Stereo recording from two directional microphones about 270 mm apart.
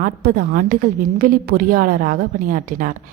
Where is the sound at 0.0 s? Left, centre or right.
Right.